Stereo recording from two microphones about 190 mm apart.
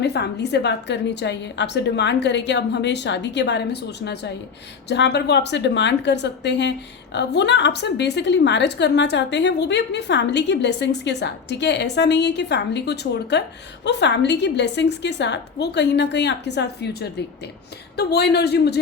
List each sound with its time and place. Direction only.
0.0 s a woman's voice: 60° left (ahead or behind)